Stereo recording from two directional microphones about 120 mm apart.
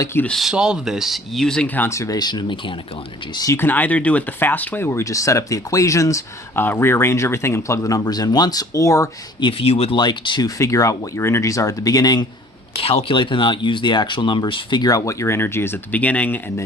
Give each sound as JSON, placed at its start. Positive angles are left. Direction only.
{"t": 0.0, "sound": "speech", "side_deg": 20}
{"t": 0.3, "sound": "speech", "side_deg": 0}
{"t": 3.3, "sound": "speech", "side_deg": 30}
{"t": 3.6, "sound": "speech", "side_deg": 15}
{"t": 9.4, "sound": "speech", "side_deg": 50}
{"t": 10.0, "sound": "speech", "side_deg": 40}
{"t": 10.6, "sound": "speech", "side_deg": 25}
{"t": 12.7, "sound": "speech", "side_deg": 55}